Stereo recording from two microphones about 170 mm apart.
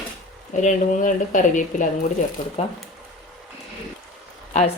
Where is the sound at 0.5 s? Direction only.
45° left (ahead or behind).